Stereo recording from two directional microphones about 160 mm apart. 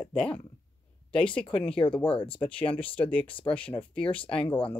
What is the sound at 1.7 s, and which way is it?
Speech, 30° left (ahead or behind).